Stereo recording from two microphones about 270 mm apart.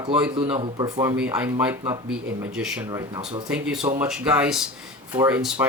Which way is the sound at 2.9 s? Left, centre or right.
Centre.